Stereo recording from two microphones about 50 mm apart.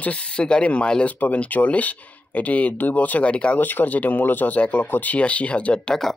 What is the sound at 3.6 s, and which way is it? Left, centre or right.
Speech, left.